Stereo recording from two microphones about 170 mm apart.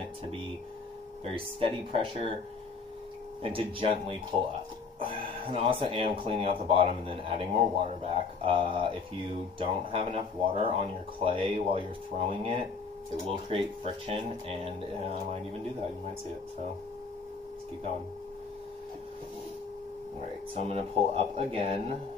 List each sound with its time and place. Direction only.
1.2 s speech: 35° right (ahead or behind)
3.4 s speech: 30° right (ahead or behind)
20.6 s speech: 35° right (ahead or behind)